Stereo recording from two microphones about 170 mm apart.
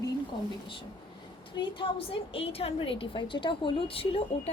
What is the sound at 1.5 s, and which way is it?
A woman's voice, 30° left (ahead or behind).